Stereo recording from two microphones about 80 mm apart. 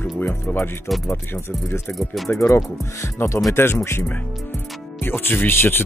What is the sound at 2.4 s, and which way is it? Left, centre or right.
Speech, left.